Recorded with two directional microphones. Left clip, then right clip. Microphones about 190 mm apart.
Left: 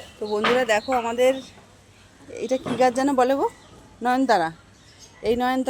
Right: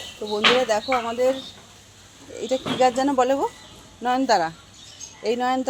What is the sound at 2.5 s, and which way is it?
Speech, 15° left (ahead or behind).